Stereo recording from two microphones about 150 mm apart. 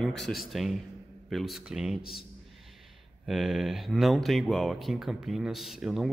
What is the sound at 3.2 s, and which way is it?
Speech, centre (ahead or behind).